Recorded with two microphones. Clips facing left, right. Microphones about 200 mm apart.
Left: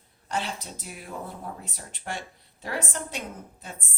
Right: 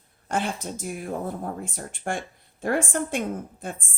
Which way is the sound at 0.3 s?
50° right (ahead or behind).